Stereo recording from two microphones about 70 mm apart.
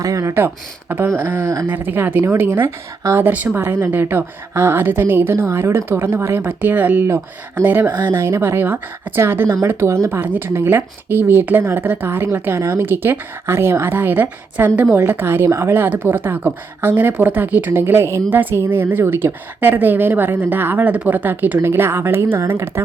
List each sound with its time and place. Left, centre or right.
0.0 s speech: right
0.3 s a woman's voice: right
10.1 s a woman's voice: right
15.7 s a woman's voice: right